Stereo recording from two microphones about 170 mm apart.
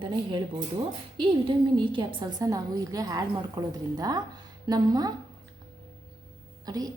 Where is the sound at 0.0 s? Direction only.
30° right (ahead or behind).